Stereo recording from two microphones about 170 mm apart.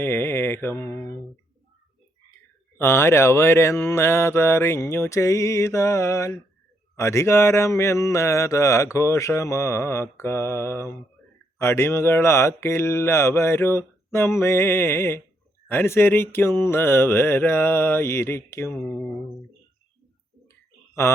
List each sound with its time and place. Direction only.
0.0 s speech: 15° left (ahead or behind)
2.7 s mantra: 15° left (ahead or behind)